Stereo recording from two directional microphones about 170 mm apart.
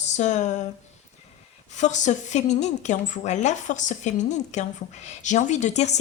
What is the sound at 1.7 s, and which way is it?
Speech, 45° left (ahead or behind).